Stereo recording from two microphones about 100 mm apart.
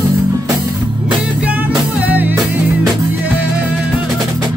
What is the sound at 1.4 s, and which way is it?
Music, 15° right (ahead or behind).